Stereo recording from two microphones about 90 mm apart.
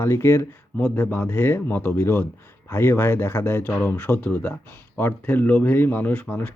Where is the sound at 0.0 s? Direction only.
30° left (ahead or behind).